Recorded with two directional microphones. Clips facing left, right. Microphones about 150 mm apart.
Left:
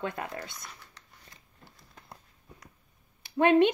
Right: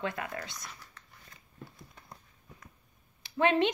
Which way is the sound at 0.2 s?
30° left (ahead or behind).